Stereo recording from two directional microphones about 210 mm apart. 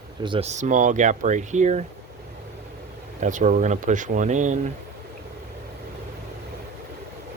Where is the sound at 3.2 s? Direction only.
35° right (ahead or behind).